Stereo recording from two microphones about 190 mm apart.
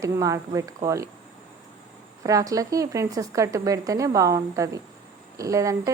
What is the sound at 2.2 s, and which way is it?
A woman's voice, 20° right (ahead or behind).